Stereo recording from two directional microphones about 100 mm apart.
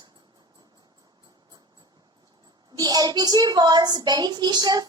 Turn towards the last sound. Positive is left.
turn(degrees=-45)  # may be behind; listen again after turning